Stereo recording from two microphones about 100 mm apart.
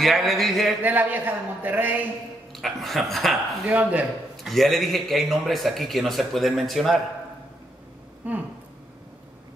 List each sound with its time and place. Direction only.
0.0 s a man's voice: centre (ahead or behind)
0.8 s a man's voice: 15° right (ahead or behind)
2.5 s a man's voice: centre (ahead or behind)
8.2 s a man's voice: 15° right (ahead or behind)